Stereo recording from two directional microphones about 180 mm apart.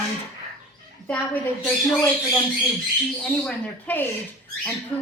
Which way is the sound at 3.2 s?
5° left (ahead or behind).